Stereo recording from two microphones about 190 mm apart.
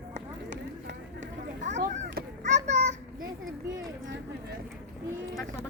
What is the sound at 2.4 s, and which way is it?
Children playing, 40° right (ahead or behind).